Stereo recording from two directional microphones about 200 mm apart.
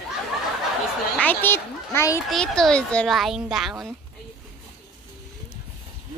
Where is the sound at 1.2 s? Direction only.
10° left (ahead or behind).